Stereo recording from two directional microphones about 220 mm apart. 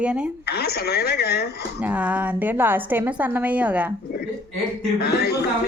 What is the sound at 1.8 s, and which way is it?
A woman's voice, 5° right (ahead or behind).